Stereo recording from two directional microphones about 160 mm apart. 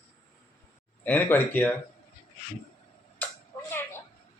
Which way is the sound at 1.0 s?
10° left (ahead or behind).